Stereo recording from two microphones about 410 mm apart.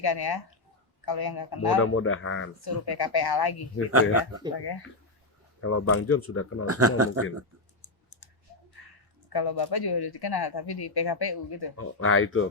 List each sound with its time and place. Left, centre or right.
0.0 s speech: left
1.8 s speech: left
2.6 s speech: left
4.5 s speech: left
5.6 s speech: left
6.7 s speech: right
7.8 s typing: left
9.3 s speech: left
11.8 s speech: left